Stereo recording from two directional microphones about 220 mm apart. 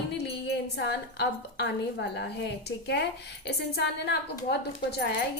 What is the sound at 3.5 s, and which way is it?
Speech, 50° left (ahead or behind).